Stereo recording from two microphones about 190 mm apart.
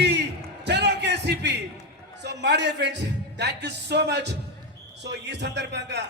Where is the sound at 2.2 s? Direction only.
65° right (ahead or behind).